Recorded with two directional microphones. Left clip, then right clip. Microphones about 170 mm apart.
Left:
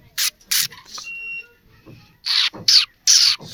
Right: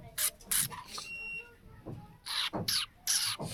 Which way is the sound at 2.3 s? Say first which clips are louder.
Left 17 dB; 15° left (ahead or behind).